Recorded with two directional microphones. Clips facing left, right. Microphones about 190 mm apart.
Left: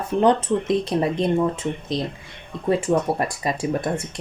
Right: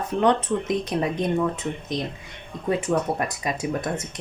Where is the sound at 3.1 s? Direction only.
30° left (ahead or behind).